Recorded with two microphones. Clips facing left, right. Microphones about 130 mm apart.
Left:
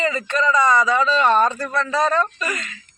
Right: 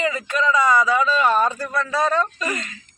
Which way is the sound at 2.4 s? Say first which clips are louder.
Right 1 dB; 30° right (ahead or behind).